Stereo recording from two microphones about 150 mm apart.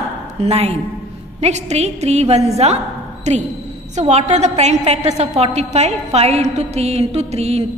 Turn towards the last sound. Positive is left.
turn(degrees=-45)  # may be behind; listen again after turning